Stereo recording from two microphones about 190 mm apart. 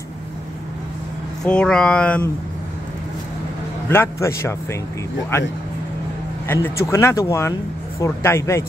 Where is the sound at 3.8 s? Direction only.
15° left (ahead or behind).